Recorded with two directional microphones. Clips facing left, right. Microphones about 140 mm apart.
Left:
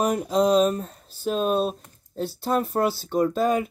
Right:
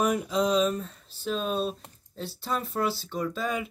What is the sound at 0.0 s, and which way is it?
Speech, 40° left (ahead or behind).